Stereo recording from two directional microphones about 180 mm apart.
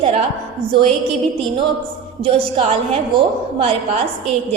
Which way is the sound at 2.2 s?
30° right (ahead or behind).